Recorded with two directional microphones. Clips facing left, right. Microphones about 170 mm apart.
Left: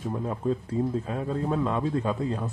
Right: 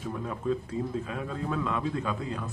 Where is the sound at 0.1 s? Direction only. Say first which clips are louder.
Left 2 dB; 30° left (ahead or behind).